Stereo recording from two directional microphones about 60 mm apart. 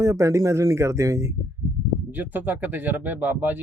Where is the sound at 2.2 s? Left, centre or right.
Right.